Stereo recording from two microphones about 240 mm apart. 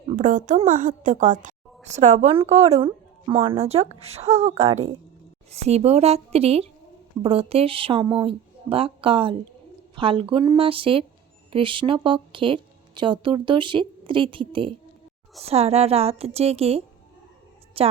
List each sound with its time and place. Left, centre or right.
0.2 s a woman's voice: right